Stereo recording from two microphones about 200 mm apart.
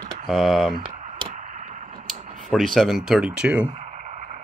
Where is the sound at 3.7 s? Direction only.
35° right (ahead or behind).